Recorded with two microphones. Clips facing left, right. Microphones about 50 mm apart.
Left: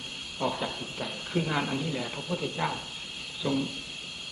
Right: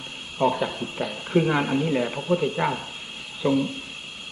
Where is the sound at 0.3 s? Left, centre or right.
Right.